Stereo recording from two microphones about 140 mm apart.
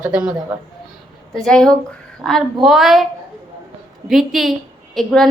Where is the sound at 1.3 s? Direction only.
5° left (ahead or behind).